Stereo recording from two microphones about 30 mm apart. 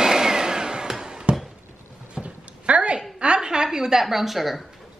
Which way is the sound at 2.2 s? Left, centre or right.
Right.